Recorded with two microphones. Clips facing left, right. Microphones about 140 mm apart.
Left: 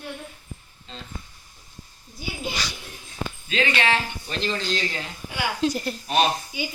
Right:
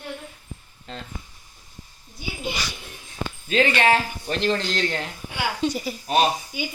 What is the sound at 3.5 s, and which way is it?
A woman's voice, 45° right (ahead or behind).